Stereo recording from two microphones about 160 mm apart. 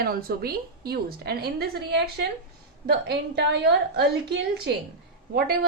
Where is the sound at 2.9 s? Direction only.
85° right.